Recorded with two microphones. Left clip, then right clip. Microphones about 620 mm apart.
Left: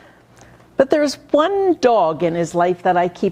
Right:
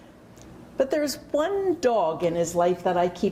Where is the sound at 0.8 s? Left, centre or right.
Left.